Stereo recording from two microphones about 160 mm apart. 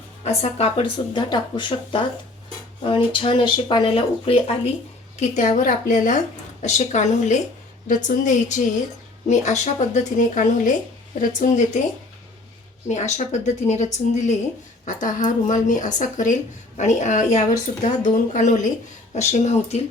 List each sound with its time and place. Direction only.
0.3 s speech: 40° left (ahead or behind)
5.2 s speech: 45° left (ahead or behind)
12.9 s speech: 45° left (ahead or behind)